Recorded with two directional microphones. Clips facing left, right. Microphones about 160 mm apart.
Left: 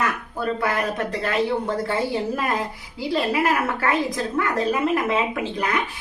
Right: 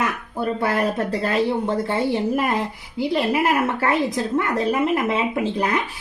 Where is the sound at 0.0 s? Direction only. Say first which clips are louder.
Right 1 dB; 25° right (ahead or behind).